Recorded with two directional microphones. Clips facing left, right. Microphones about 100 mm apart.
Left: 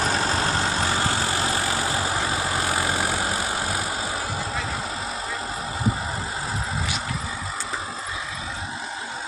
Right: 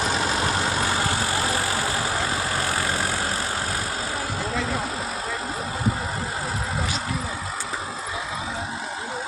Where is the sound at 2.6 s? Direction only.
15° left (ahead or behind).